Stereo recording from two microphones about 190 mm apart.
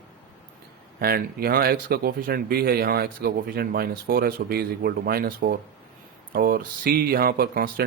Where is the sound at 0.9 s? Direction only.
50° right (ahead or behind).